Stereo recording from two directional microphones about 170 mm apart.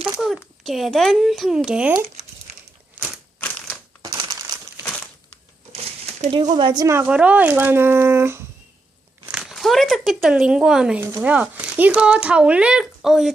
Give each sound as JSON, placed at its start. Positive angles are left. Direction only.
{"t": 0.2, "sound": "a child's voice", "side_deg": 0}
{"t": 2.5, "sound": "a sound", "side_deg": -40}
{"t": 4.0, "sound": "crushing", "side_deg": -25}
{"t": 5.7, "sound": "a sound", "side_deg": -40}
{"t": 6.5, "sound": "speech", "side_deg": -25}
{"t": 9.3, "sound": "speech", "side_deg": 0}